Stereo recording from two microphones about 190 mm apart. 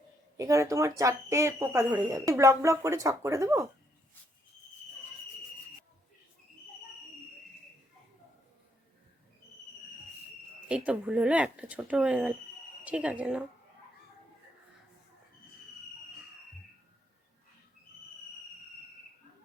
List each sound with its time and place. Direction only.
0.3 s speech: 15° right (ahead or behind)
10.7 s speech: 5° right (ahead or behind)